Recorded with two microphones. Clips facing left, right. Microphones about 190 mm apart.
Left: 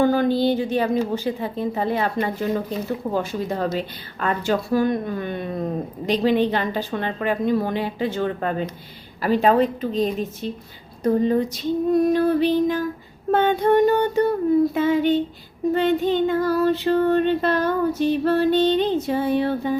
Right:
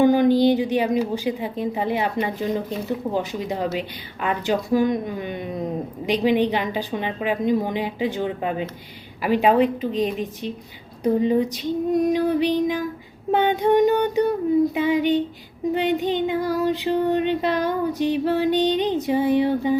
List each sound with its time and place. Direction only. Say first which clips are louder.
0.0 s a woman's voice: right 3 dB; 15° right (ahead or behind)